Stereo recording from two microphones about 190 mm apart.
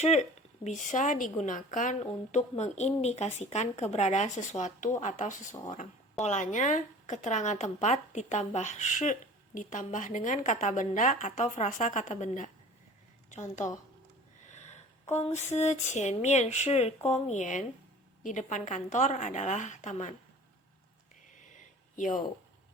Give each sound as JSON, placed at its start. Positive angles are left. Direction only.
{"t": 0.0, "sound": "speech", "side_deg": 35}
{"t": 14.4, "sound": "sniff", "side_deg": 40}
{"t": 15.1, "sound": "speech", "side_deg": 35}
{"t": 21.3, "sound": "a sound", "side_deg": 40}